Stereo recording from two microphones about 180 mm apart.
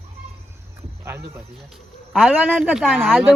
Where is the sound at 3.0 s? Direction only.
5° left (ahead or behind).